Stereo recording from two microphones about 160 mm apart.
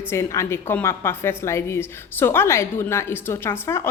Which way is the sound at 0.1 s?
15° left (ahead or behind).